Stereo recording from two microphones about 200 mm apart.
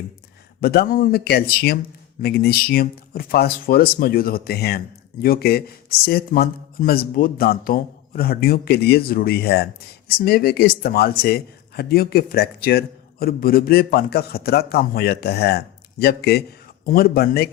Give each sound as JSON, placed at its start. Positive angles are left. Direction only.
{"t": 0.6, "sound": "speech", "side_deg": 50}